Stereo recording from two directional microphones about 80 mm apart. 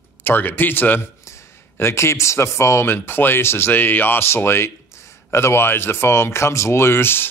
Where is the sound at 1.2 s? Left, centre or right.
Left.